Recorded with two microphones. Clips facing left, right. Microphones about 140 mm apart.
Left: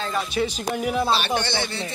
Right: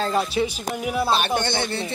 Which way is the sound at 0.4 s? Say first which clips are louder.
Left 1 dB; 15° right (ahead or behind).